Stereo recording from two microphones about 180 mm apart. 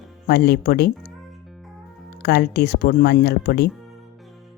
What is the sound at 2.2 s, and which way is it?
Speech, 65° left (ahead or behind).